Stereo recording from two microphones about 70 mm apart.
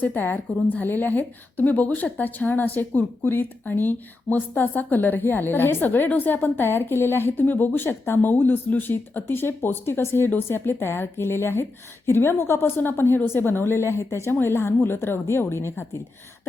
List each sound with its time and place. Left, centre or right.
0.0 s a woman's voice: left